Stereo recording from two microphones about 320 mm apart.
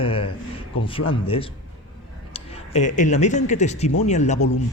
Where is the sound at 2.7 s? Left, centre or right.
Left.